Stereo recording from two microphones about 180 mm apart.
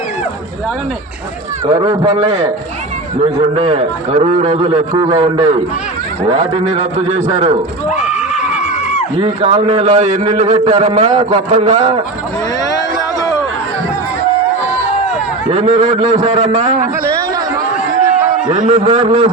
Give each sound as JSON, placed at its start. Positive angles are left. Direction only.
{"t": 1.8, "sound": "a man's voice", "side_deg": -25}
{"t": 3.5, "sound": "a man's voice", "side_deg": -30}
{"t": 9.1, "sound": "a man's voice", "side_deg": -30}
{"t": 15.4, "sound": "a man's voice", "side_deg": -30}
{"t": 16.2, "sound": "a man's voice", "side_deg": -40}
{"t": 18.5, "sound": "a man's voice", "side_deg": -40}